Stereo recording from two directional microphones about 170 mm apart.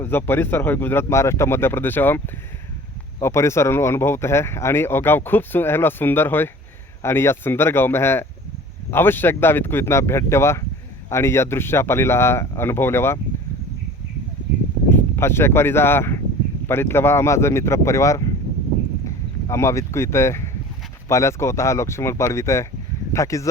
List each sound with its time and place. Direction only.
0.0 s speech: 10° left (ahead or behind)
14.8 s speech: 15° left (ahead or behind)
19.0 s a sound: 15° left (ahead or behind)
21.1 s speech: 15° left (ahead or behind)